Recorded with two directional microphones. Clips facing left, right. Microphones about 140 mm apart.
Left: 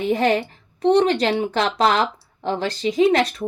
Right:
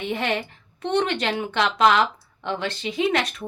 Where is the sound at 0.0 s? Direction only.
40° left (ahead or behind).